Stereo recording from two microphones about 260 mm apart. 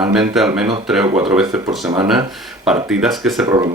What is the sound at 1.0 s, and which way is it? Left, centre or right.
Speech, centre.